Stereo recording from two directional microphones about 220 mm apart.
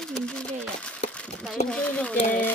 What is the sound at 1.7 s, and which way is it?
Speech, 5° left (ahead or behind).